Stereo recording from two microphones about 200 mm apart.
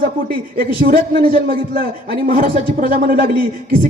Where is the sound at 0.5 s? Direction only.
45° right (ahead or behind).